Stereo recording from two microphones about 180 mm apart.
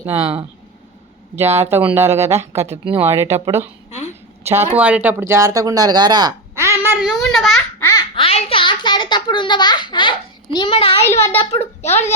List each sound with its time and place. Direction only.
0.0 s speech: 15° right (ahead or behind)
1.4 s speech: 15° right (ahead or behind)
2.6 s speech: 30° right (ahead or behind)
3.0 s speech: 15° right (ahead or behind)
7.2 s babbling: centre (ahead or behind)
7.8 s laughter: 15° left (ahead or behind)
8.1 s a sound: 30° left (ahead or behind)
11.0 s a child's voice: 15° left (ahead or behind)
11.3 s a child's voice: 35° left (ahead or behind)